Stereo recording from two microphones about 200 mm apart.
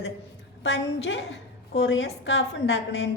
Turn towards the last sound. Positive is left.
turn(degrees=80)